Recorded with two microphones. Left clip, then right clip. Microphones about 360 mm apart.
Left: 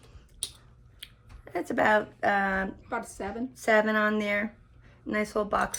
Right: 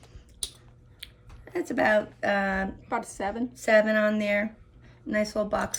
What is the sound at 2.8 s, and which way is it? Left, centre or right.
Speech, right.